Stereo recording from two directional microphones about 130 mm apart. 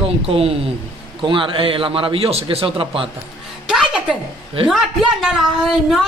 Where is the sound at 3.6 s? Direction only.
5° right (ahead or behind).